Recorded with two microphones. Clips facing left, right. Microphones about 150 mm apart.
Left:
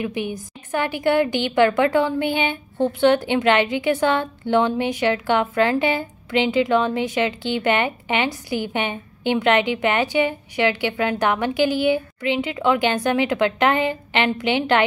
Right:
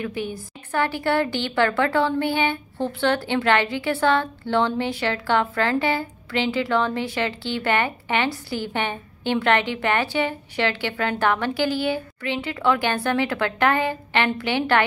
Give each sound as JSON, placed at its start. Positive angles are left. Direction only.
{"t": 0.0, "sound": "a woman's voice", "side_deg": 15}